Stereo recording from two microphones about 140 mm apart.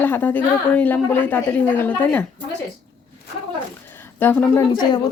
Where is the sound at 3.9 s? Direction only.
15° left (ahead or behind).